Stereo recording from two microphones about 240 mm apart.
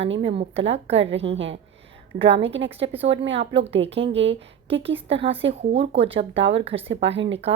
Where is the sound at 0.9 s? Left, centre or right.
Right.